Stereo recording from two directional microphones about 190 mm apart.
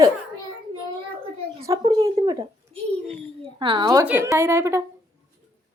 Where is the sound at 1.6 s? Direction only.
15° right (ahead or behind).